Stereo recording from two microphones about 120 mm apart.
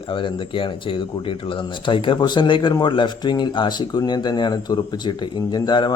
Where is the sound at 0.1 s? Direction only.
45° left (ahead or behind).